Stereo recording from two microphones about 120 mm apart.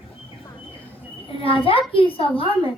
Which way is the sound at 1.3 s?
50° left (ahead or behind).